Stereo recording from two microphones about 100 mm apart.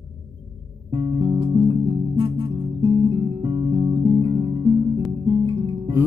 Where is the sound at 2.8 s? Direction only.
55° right (ahead or behind).